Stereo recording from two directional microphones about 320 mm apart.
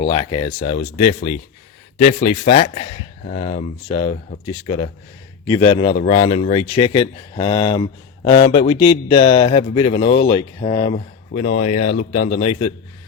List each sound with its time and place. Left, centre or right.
0.0 s a man's voice: centre